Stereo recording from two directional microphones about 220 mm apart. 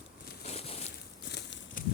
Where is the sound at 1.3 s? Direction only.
50° left (ahead or behind).